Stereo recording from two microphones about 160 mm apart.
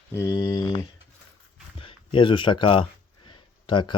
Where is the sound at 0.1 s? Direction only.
20° left (ahead or behind).